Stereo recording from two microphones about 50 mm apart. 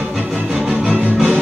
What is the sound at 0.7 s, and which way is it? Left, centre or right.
Music, centre.